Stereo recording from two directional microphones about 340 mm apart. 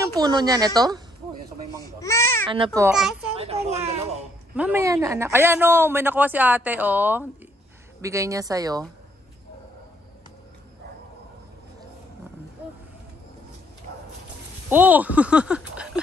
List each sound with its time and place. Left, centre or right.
0.1 s a woman's voice: centre
1.8 s baby cry: centre
2.4 s a woman's voice: centre
3.3 s a sound: centre
4.6 s a woman's voice: centre
14.7 s speech: centre